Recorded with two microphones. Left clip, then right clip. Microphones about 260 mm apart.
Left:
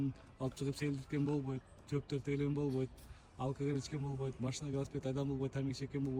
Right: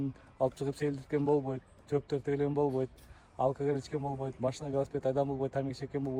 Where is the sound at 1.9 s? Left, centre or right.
Centre.